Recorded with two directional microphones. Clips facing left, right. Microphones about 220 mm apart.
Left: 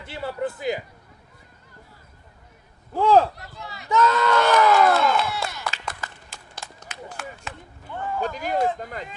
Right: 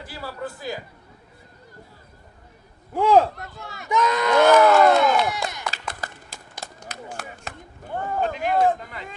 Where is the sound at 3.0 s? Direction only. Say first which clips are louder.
Even; 15° right (ahead or behind).